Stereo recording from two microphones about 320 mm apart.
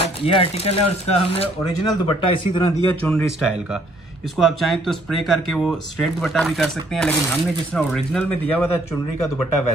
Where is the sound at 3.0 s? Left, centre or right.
Centre.